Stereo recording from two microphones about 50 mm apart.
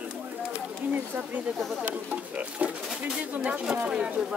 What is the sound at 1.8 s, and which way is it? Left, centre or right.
Speech, right.